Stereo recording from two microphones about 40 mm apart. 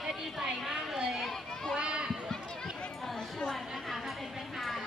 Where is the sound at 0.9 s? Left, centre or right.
Centre.